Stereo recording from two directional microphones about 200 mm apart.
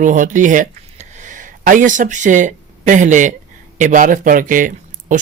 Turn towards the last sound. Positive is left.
turn(degrees=-40)  # may be behind; listen again after turning